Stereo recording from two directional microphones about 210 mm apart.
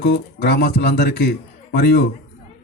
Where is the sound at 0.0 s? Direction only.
50° left (ahead or behind).